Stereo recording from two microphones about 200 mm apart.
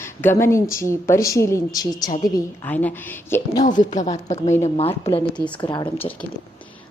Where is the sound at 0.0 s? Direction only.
10° left (ahead or behind).